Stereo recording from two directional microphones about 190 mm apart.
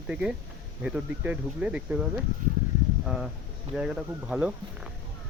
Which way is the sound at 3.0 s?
Centre (ahead or behind).